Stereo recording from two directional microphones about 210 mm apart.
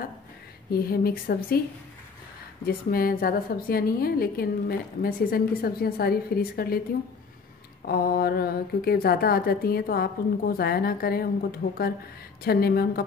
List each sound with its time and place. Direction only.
0.7 s a woman's voice: 45° left (ahead or behind)
2.6 s a woman's voice: 45° left (ahead or behind)
7.8 s a woman's voice: 45° left (ahead or behind)